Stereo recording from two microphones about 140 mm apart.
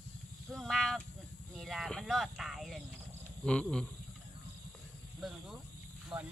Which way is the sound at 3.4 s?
5° left (ahead or behind).